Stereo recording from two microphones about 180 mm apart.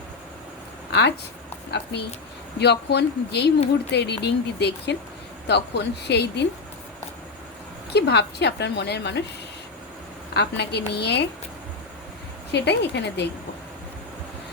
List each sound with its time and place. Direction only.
0.9 s a woman's voice: 70° left (ahead or behind)
7.9 s a woman's voice: 70° left (ahead or behind)
10.3 s a woman's voice: 70° left (ahead or behind)
12.5 s a woman's voice: 70° left (ahead or behind)